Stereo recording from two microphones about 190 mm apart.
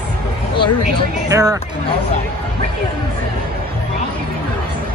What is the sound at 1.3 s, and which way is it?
Speech, 20° right (ahead or behind).